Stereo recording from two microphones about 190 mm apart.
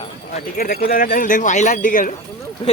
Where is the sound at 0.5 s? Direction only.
50° left (ahead or behind).